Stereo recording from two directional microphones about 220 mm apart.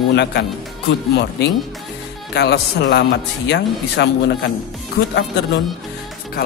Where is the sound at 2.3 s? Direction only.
50° left (ahead or behind).